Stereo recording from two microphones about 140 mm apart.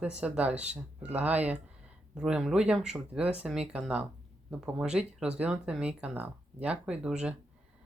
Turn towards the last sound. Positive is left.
turn(degrees=-5)  # may be behind; listen again after turning